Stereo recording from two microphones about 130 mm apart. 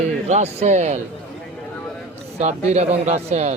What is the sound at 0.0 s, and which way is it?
Speech, 60° right (ahead or behind).